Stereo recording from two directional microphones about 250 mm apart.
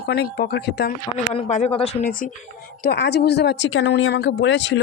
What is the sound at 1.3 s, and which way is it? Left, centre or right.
Speech, left.